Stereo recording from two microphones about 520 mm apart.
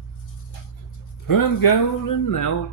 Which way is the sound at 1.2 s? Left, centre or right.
Left.